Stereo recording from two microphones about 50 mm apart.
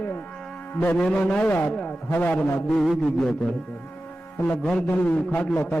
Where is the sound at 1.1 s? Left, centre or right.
Centre.